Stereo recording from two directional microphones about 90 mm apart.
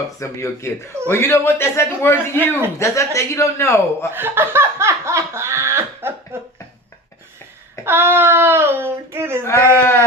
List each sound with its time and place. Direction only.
0.2 s a man's voice: 30° left (ahead or behind)
4.1 s laughter: 25° right (ahead or behind)
7.9 s a sound: 25° right (ahead or behind)
9.4 s speech: 30° left (ahead or behind)